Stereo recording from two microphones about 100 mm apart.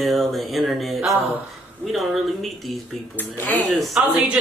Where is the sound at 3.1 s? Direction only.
20° left (ahead or behind).